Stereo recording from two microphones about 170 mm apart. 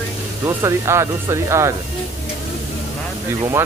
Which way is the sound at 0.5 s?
15° right (ahead or behind).